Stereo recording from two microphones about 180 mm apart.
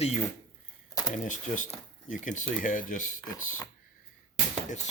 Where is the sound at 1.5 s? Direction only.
45° left (ahead or behind).